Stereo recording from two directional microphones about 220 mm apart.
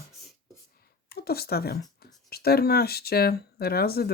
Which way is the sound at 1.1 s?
45° left (ahead or behind).